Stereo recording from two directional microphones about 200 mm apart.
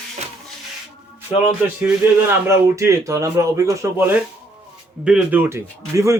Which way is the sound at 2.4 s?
15° right (ahead or behind).